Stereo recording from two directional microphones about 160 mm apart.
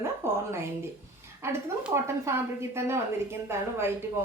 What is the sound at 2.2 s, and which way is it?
Speech, 15° right (ahead or behind).